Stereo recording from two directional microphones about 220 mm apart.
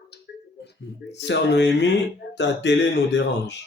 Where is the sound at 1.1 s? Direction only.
50° left (ahead or behind).